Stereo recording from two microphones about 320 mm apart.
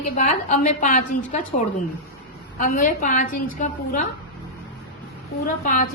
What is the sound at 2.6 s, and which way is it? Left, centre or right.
A woman's voice, left.